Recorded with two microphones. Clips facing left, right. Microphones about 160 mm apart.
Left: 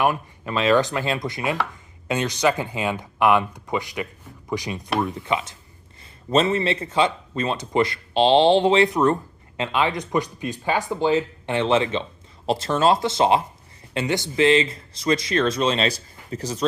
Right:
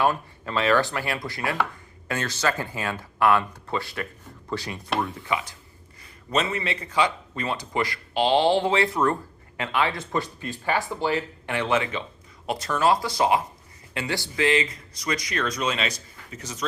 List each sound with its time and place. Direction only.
0.0 s a man's voice: 15° left (ahead or behind); by 16.6 s 35° left (ahead or behind)